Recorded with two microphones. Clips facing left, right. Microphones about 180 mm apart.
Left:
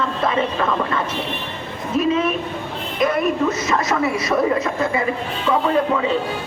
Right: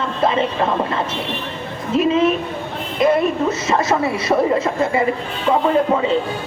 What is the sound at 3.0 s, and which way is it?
Speech, 30° right (ahead or behind).